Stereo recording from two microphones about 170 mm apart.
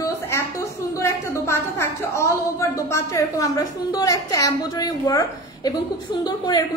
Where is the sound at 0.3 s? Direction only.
15° left (ahead or behind).